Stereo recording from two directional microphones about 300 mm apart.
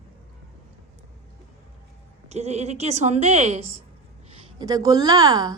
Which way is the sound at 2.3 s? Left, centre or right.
Right.